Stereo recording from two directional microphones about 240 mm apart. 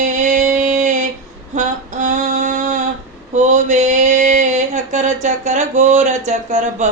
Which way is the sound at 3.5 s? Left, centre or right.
Right.